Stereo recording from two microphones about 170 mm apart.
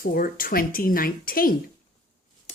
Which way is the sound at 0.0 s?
55° left (ahead or behind).